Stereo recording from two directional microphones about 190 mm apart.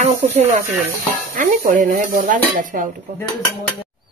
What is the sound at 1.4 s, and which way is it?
Speech, 45° right (ahead or behind).